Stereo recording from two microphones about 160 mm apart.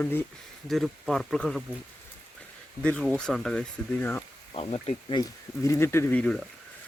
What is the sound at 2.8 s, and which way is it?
Speech, 5° left (ahead or behind).